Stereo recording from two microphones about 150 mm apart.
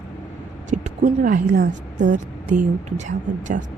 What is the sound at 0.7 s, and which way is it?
A woman's voice, 55° right (ahead or behind).